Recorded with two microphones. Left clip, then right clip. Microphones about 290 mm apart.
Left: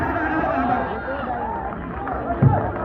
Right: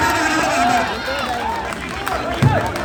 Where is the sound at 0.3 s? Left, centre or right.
Right.